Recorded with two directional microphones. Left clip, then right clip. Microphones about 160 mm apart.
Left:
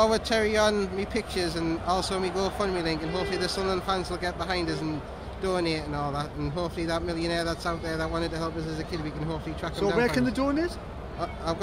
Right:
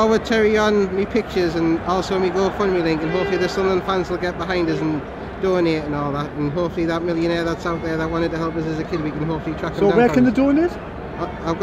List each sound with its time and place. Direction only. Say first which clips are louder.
0.0 s speech: right 7 dB; 10° left (ahead or behind)
9.9 s speech: right 9 dB; 15° right (ahead or behind)